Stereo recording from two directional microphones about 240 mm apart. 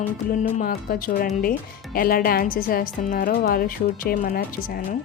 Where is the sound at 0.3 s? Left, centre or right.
Left.